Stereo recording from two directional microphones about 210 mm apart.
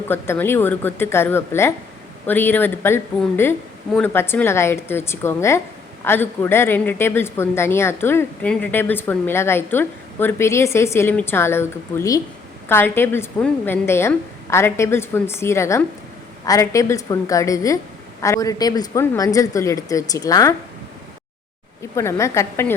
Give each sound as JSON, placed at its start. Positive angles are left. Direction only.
{"t": 0.1, "sound": "speech", "side_deg": 10}
{"t": 21.9, "sound": "speech", "side_deg": 15}